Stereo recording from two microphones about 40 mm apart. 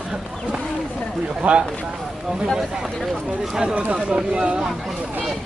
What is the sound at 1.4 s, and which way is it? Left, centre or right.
Speech, right.